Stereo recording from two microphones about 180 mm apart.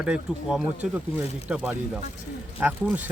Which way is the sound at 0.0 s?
5° right (ahead or behind).